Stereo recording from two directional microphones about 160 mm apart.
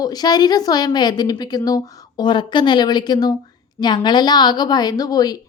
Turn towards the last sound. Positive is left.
turn(degrees=25)  # may be behind; listen again after turning